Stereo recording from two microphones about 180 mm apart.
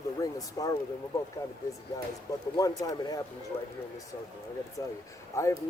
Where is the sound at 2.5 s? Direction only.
20° left (ahead or behind).